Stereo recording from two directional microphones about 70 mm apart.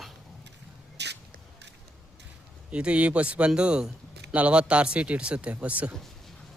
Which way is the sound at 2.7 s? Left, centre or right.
Centre.